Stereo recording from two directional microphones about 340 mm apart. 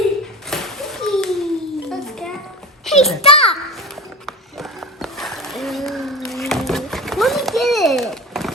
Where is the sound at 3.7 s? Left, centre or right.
Centre.